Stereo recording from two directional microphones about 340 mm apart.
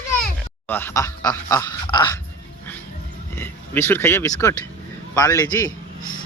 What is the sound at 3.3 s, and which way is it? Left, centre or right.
Speech, centre.